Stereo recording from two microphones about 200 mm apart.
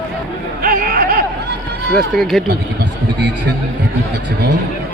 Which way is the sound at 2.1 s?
Centre (ahead or behind).